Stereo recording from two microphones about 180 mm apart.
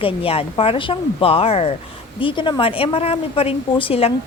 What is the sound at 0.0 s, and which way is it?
Speech, 30° left (ahead or behind).